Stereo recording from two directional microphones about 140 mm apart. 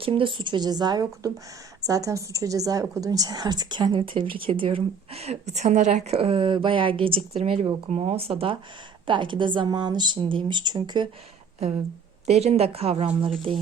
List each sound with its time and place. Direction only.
0.0 s a woman's voice: 40° right (ahead or behind); by 6.1 s 60° right (ahead or behind)
6.1 s a woman's voice: 40° right (ahead or behind)
12.2 s a woman's voice: 50° right (ahead or behind)